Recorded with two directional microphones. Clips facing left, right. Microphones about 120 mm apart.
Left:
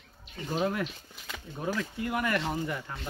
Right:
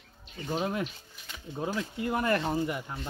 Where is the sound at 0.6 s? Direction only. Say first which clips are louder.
Left 4 dB; 20° right (ahead or behind).